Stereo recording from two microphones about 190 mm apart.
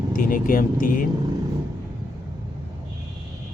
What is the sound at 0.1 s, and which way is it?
Speech, 45° left (ahead or behind).